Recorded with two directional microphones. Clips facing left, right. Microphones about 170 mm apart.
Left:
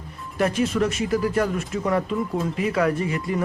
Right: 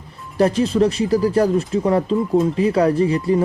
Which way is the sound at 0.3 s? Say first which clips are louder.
Right 6 dB; 35° right (ahead or behind).